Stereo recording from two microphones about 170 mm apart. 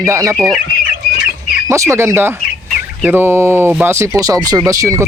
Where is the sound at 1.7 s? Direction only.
15° right (ahead or behind).